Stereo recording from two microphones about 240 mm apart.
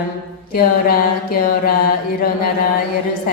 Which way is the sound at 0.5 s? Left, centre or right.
Left.